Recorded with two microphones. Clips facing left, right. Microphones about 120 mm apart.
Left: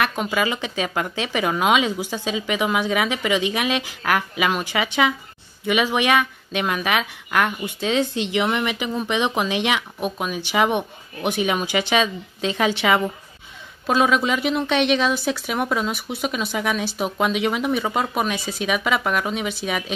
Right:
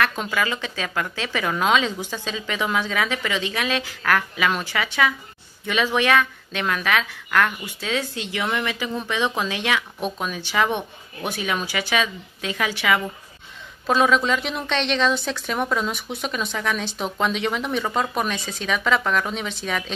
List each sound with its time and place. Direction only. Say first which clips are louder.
0.0 s speech: left 2 dB; 15° left (ahead or behind)
13.8 s speech: even; 5° left (ahead or behind)